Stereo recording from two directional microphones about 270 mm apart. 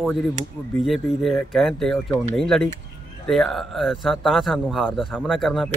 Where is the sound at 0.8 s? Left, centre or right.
Centre.